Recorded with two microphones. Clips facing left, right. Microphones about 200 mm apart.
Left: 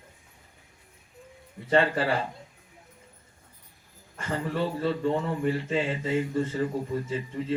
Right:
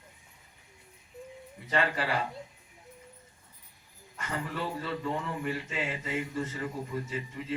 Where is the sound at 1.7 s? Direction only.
30° left (ahead or behind).